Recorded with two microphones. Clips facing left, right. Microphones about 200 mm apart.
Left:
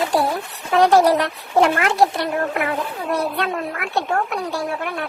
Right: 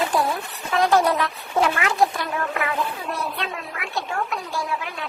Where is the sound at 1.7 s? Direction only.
70° left (ahead or behind).